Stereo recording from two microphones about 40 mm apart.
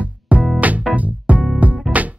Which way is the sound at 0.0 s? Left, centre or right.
Right.